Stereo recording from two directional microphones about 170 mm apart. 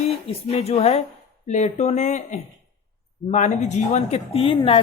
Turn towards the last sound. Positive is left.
turn(degrees=30)  # may be behind; listen again after turning